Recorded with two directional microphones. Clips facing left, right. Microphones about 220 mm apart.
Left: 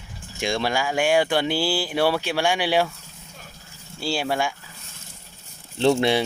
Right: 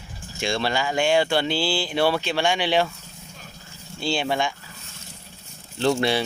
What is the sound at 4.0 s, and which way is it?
Speech, 5° left (ahead or behind).